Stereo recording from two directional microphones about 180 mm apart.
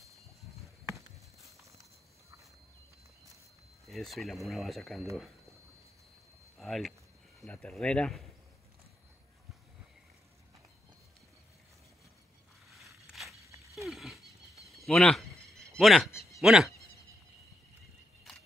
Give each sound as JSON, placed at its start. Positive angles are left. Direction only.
{"t": 3.8, "sound": "speech", "side_deg": 0}
{"t": 6.6, "sound": "speech", "side_deg": 0}
{"t": 12.6, "sound": "scrape", "side_deg": 0}
{"t": 13.4, "sound": "dog", "side_deg": -15}
{"t": 13.7, "sound": "wild animals", "side_deg": 0}
{"t": 14.7, "sound": "a sound", "side_deg": 0}
{"t": 15.8, "sound": "speech", "side_deg": 0}
{"t": 16.1, "sound": "a sound", "side_deg": 15}
{"t": 16.3, "sound": "speech", "side_deg": 0}